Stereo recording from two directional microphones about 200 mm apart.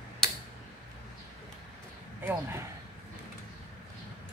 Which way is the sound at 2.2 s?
10° right (ahead or behind).